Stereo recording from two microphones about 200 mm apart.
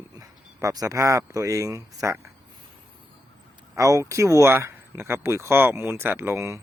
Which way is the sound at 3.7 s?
15° right (ahead or behind).